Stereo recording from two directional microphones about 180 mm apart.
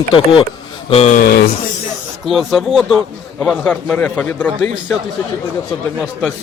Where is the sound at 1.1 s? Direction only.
60° left (ahead or behind).